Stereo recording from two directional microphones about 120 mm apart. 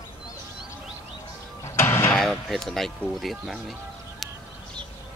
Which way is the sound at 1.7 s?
20° left (ahead or behind).